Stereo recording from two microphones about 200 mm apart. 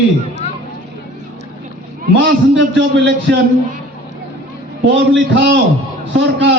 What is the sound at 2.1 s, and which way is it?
Speech, 65° right (ahead or behind).